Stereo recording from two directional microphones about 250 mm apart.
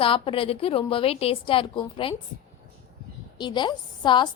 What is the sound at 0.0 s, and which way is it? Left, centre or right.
A woman's voice, left.